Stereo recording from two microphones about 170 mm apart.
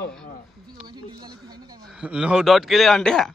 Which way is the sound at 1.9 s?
5° right (ahead or behind).